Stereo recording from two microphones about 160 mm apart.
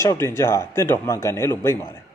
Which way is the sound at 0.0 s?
15° left (ahead or behind).